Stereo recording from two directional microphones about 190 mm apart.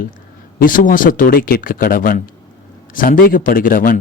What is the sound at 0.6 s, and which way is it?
Speech, 45° left (ahead or behind).